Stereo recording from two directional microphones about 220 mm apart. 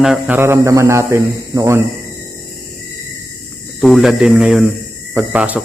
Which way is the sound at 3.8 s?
Centre (ahead or behind).